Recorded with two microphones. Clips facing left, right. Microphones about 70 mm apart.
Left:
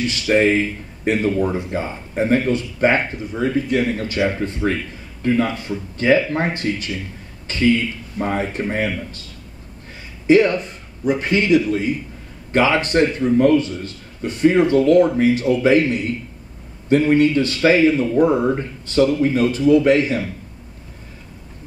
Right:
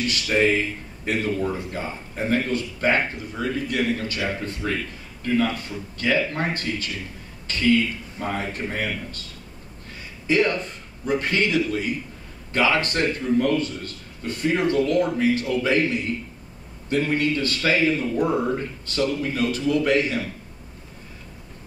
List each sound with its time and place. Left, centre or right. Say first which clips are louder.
0.0 s speech: left 5 dB; left
10.2 s a man's voice: left 7 dB; left
16.9 s a man's voice: left 8 dB; centre